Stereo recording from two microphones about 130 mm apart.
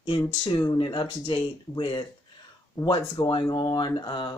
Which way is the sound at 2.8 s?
25° left (ahead or behind).